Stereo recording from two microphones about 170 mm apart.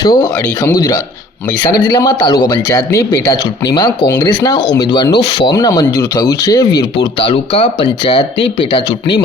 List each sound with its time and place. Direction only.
0.0 s speech: 25° left (ahead or behind)